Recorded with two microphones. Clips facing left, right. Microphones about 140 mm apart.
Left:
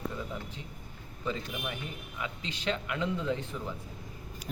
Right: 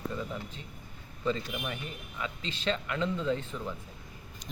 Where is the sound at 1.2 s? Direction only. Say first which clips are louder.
Right 3 dB; 5° left (ahead or behind).